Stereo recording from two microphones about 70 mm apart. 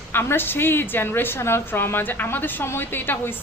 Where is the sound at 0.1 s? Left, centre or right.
Left.